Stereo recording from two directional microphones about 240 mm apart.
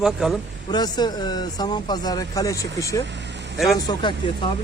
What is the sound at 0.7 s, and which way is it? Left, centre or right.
Speech, centre.